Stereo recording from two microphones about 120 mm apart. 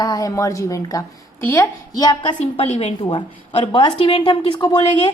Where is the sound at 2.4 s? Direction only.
65° left (ahead or behind).